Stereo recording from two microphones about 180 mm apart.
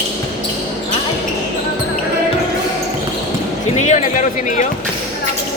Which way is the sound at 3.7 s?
40° left (ahead or behind).